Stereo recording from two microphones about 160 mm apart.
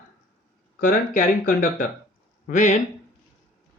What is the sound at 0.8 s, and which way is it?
Speech, 55° left (ahead or behind).